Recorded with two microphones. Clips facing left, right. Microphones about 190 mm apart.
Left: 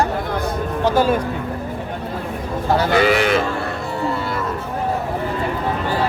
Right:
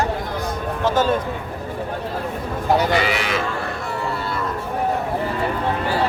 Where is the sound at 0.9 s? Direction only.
10° left (ahead or behind).